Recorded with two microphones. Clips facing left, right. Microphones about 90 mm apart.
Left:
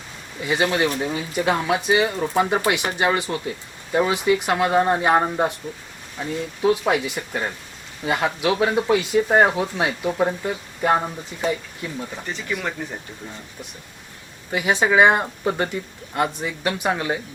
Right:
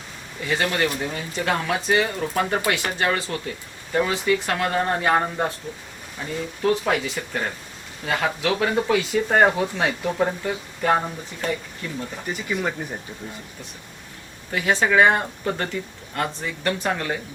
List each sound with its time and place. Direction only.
0.4 s speech: 15° left (ahead or behind)
12.2 s speech: 10° right (ahead or behind)
14.5 s speech: 15° left (ahead or behind)